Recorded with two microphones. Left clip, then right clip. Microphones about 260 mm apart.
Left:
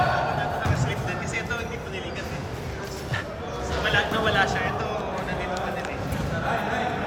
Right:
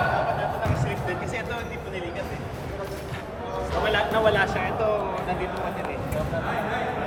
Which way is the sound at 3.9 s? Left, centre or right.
Centre.